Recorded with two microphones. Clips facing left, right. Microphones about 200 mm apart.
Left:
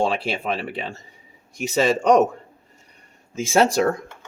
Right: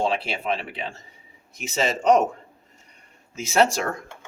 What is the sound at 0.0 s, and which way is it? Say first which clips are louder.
Speech: left 2 dB; 40° left (ahead or behind).